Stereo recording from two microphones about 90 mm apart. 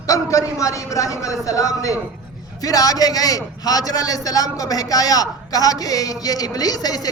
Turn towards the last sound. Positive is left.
turn(degrees=45)  # may be behind; listen again after turning